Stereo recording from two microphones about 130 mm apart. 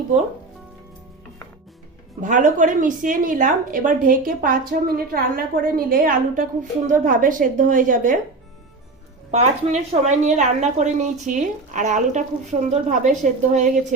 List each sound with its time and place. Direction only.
2.2 s speech: 80° right
9.3 s a woman's voice: 60° right (ahead or behind)